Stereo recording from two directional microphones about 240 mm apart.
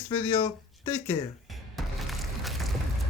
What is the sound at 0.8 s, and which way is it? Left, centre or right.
Speech, centre.